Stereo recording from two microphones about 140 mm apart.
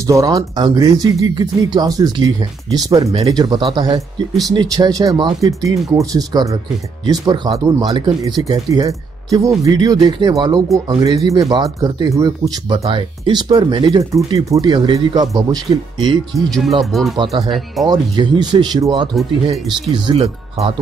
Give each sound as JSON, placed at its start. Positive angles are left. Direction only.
{"t": 0.0, "sound": "speech", "side_deg": -25}
{"t": 16.3, "sound": "speech", "side_deg": 0}
{"t": 17.8, "sound": "speech", "side_deg": -30}
{"t": 20.2, "sound": "speech", "side_deg": -50}